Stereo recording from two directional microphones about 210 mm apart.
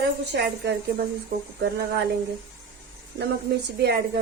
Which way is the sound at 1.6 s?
50° right (ahead or behind).